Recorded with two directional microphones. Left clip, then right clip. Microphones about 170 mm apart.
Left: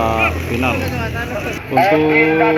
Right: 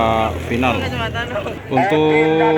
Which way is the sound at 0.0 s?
20° right (ahead or behind).